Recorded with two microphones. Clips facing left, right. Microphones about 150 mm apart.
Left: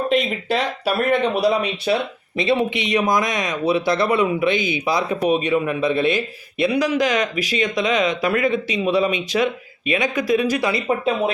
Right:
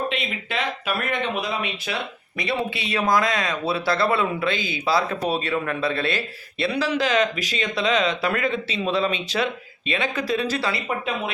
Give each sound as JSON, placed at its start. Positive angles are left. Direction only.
{"t": 0.1, "sound": "speech", "side_deg": 40}
{"t": 2.4, "sound": "speech", "side_deg": 20}